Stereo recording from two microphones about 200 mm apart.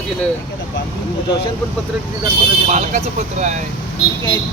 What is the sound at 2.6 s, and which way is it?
Speech, 35° right (ahead or behind).